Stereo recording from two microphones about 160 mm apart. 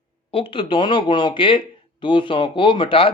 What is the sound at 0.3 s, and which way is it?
Speech, 35° left (ahead or behind).